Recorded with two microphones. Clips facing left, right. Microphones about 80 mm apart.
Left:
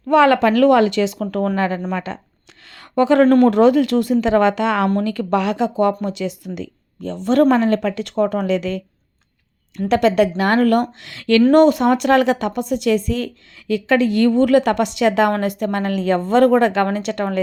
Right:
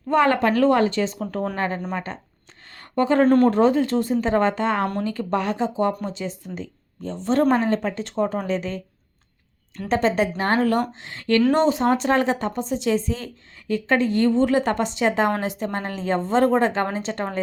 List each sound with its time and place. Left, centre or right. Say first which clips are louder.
0.1 s a woman's voice: left 5 dB; left
2.7 s a sound: left 5 dB; left
3.2 s speech: left 4 dB; left
5.0 s a woman's voice: left 5 dB; left
9.9 s speech: left 5 dB; left
11.5 s speech: left 6 dB; left